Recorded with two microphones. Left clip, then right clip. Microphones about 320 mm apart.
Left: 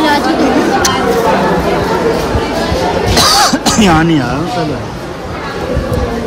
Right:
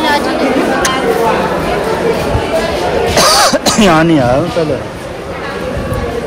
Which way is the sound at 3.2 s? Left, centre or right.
Centre.